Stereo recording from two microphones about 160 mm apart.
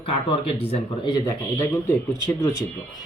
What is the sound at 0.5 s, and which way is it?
Speech, 35° left (ahead or behind).